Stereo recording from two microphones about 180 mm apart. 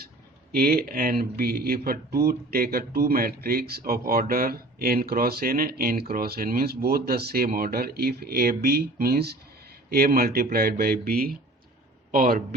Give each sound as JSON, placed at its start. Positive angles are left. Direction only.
{"t": 0.5, "sound": "speech", "side_deg": -60}